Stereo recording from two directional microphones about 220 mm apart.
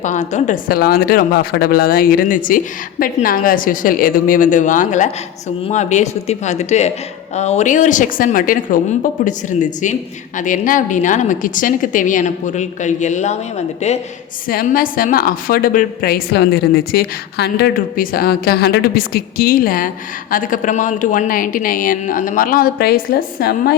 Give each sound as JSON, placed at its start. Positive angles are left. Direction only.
{"t": 0.0, "sound": "a woman's voice", "side_deg": 35}